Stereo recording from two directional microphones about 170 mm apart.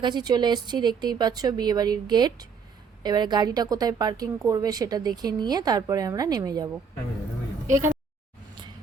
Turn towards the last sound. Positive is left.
turn(degrees=-15)  # may be behind; listen again after turning